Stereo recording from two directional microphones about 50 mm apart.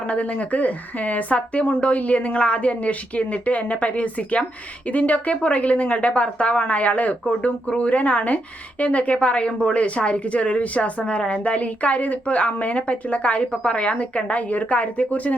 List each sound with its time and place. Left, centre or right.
0.1 s a woman's voice: left